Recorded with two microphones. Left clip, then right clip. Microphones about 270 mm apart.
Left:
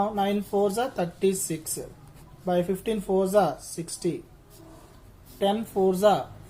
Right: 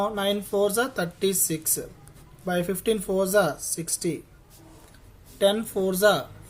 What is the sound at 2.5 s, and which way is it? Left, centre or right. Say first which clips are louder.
Speech: right 2 dB; right.